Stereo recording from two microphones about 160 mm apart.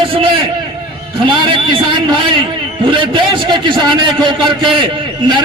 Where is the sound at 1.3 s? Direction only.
30° right (ahead or behind).